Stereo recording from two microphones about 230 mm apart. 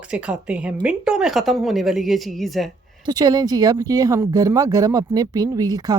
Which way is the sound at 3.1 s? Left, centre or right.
Centre.